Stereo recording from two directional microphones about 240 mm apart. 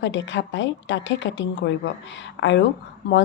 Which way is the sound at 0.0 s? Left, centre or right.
Left.